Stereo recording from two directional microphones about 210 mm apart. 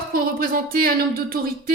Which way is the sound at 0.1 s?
45° right (ahead or behind).